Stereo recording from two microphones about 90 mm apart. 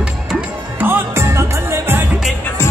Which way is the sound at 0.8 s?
25° right (ahead or behind).